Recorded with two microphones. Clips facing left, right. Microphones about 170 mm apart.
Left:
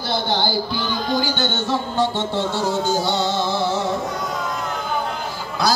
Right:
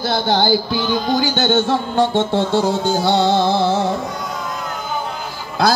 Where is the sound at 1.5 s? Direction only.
55° right (ahead or behind).